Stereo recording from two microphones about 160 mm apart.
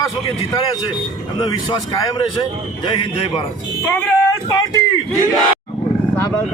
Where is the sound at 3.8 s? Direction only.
15° left (ahead or behind).